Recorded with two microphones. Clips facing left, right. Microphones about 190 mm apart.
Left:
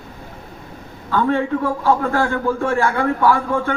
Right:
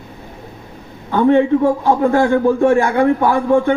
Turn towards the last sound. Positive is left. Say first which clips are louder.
# right 4 dB
turn(degrees=-20)  # may be behind; listen again after turning